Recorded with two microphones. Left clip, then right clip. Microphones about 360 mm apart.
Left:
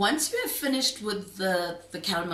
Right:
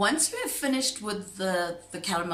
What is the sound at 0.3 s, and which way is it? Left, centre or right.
A woman's voice, centre.